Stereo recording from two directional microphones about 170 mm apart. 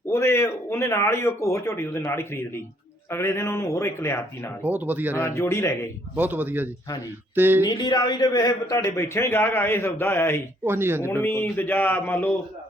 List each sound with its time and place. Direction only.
0.1 s speech: 15° left (ahead or behind)
4.6 s speech: 10° right (ahead or behind)
5.1 s speech: 15° left (ahead or behind)
6.1 s speech: 10° right (ahead or behind)
7.6 s speech: 25° left (ahead or behind)
10.6 s speech: 15° right (ahead or behind)
11.0 s speech: 15° left (ahead or behind)